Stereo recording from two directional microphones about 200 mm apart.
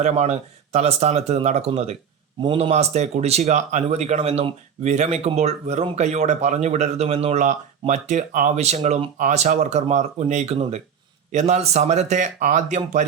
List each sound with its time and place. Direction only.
0.0 s speech: 35° right (ahead or behind)